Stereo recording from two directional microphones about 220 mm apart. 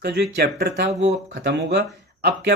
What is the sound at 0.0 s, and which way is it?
A man's voice, 45° right (ahead or behind).